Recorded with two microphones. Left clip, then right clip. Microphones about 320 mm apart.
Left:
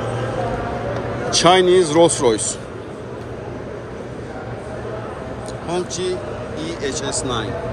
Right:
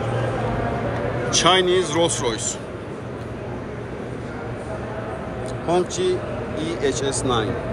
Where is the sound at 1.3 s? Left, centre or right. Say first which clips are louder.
Left 4 dB; centre.